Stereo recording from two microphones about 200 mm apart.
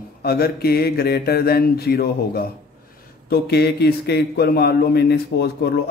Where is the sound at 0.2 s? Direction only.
50° left (ahead or behind).